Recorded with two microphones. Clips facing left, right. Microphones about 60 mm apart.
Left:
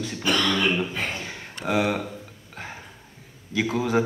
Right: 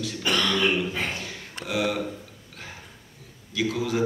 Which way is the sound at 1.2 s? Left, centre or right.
Left.